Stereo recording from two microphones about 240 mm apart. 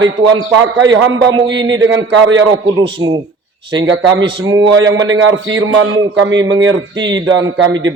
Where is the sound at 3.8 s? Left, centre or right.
Right.